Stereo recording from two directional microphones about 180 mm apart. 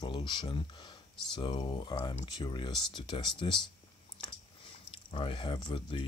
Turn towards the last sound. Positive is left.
turn(degrees=30)  # may be behind; listen again after turning